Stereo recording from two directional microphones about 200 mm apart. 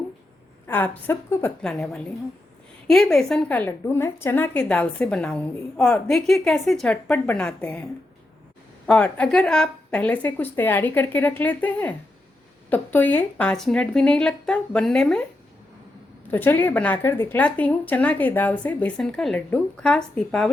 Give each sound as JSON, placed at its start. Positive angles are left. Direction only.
{"t": 0.7, "sound": "a woman's voice", "side_deg": 10}
{"t": 8.9, "sound": "a woman's voice", "side_deg": 5}
{"t": 16.3, "sound": "speech", "side_deg": 10}